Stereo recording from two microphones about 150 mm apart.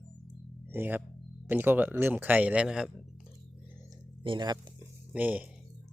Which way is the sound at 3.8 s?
30° right (ahead or behind).